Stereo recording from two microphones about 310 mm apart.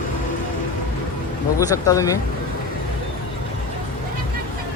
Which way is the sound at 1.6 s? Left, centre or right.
Centre.